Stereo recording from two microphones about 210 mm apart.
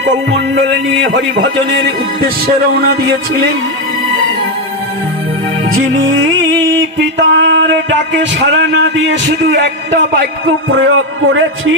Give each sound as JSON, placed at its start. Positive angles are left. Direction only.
{"t": 0.7, "sound": "music", "side_deg": -60}
{"t": 5.7, "sound": "music", "side_deg": -60}